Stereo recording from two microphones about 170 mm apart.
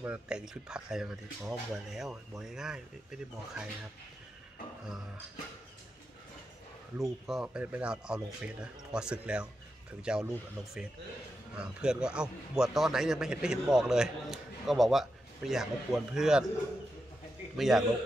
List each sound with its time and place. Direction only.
0.0 s a man's voice: 5° right (ahead or behind)
7.0 s a man's voice: centre (ahead or behind)
17.6 s a man's voice: centre (ahead or behind)